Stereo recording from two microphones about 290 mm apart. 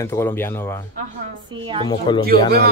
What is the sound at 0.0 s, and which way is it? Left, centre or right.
Speech, centre.